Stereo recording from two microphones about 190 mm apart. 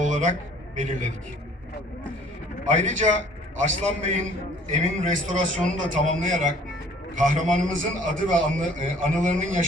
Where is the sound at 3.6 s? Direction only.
40° right (ahead or behind).